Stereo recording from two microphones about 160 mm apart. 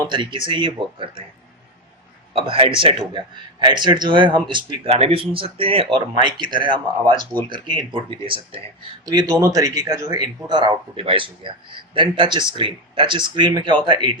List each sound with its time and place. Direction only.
0.0 s a man's voice: 30° right (ahead or behind)
2.3 s a man's voice: 35° right (ahead or behind)
9.0 s a man's voice: 20° right (ahead or behind)